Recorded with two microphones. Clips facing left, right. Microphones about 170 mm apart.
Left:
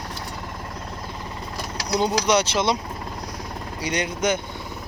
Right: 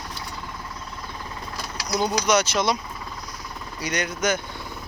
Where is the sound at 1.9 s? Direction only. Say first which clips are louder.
Left 1 dB; 30° left (ahead or behind).